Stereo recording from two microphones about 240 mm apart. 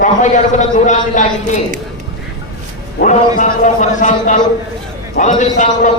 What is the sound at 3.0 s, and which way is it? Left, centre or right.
A man's voice, left.